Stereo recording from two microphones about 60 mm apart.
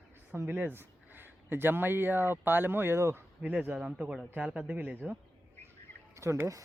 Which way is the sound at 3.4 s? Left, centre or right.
Centre.